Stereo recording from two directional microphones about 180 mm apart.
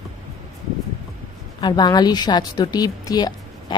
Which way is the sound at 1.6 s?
20° left (ahead or behind).